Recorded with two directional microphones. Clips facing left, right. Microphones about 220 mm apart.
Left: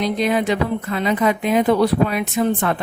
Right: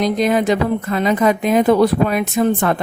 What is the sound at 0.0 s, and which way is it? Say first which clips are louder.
A woman's voice: right 3 dB; 45° right (ahead or behind).